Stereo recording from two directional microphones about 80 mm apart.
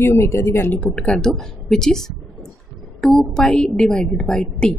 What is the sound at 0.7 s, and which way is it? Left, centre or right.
A woman's voice, centre.